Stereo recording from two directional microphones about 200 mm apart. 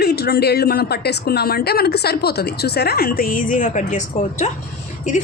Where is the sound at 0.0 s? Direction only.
50° left (ahead or behind).